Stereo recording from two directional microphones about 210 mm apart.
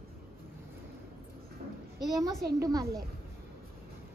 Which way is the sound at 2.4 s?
15° right (ahead or behind).